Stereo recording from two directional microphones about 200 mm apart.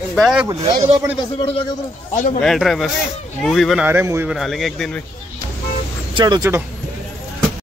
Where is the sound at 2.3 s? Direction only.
Centre (ahead or behind).